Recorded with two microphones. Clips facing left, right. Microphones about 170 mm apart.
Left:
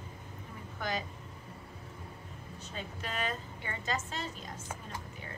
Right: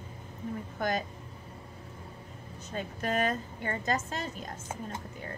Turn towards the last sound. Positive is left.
turn(degrees=-50)  # may be behind; listen again after turning